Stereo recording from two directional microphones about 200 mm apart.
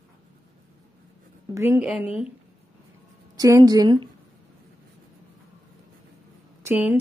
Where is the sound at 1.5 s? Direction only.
10° right (ahead or behind).